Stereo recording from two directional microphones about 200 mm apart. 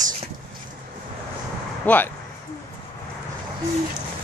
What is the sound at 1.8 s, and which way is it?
Speech, 10° left (ahead or behind).